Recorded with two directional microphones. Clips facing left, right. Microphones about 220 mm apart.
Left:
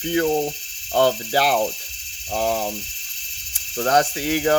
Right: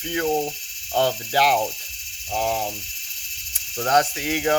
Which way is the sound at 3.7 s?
35° left (ahead or behind).